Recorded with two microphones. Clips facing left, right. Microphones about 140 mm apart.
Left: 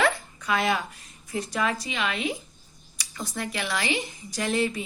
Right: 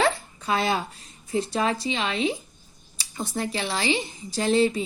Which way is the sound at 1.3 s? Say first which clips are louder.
Right 3 dB; 30° right (ahead or behind).